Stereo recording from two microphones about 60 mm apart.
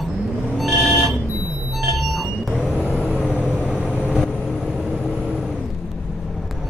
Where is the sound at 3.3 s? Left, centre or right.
Centre.